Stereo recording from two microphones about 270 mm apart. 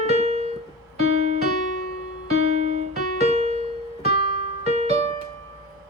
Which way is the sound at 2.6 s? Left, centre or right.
Right.